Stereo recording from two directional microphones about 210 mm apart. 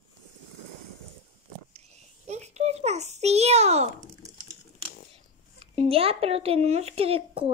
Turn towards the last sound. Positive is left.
turn(degrees=-25)  # may be behind; listen again after turning